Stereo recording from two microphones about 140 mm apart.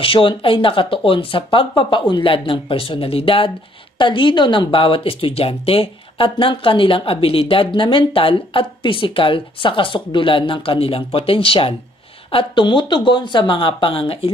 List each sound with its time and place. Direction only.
0.0 s speech: 40° left (ahead or behind)